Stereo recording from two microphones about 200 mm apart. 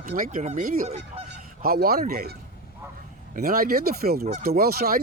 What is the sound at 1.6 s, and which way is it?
Speech, 50° right (ahead or behind).